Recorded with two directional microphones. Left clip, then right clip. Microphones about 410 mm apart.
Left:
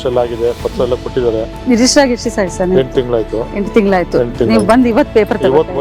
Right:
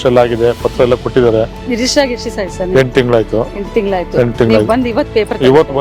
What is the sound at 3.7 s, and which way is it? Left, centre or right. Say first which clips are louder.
Speech: left 2 dB; left.